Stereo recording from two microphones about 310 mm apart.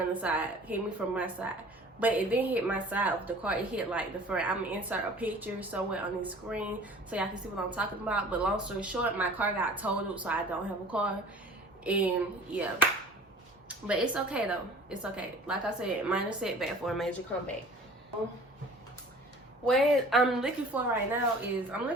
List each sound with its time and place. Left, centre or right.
0.1 s a woman's voice: centre
19.6 s a woman's voice: centre